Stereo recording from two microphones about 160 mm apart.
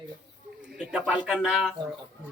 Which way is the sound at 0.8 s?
5° right (ahead or behind).